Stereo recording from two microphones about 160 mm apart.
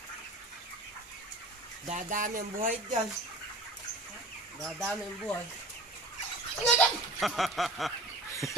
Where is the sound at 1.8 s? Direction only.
50° right (ahead or behind).